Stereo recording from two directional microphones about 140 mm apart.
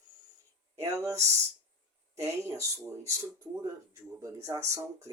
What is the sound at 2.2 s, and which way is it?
Speech, 20° right (ahead or behind).